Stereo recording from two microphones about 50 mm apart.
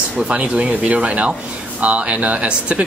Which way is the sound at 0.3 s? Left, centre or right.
Right.